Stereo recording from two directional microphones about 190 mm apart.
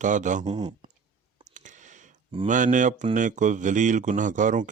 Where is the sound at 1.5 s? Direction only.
40° right (ahead or behind).